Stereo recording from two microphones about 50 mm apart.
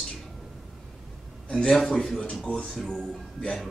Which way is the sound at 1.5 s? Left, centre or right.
Centre.